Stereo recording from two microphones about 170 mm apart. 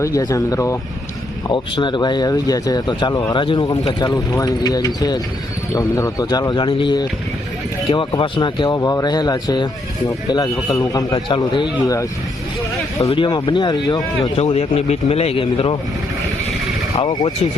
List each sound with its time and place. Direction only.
0.0 s speech: 20° left (ahead or behind)
13.1 s speech: 25° left (ahead or behind)
14.3 s speech: 40° left (ahead or behind)
16.9 s speech: 30° left (ahead or behind)